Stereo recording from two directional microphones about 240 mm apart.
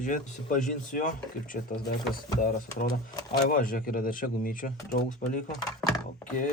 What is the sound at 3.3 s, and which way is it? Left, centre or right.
Speech, left.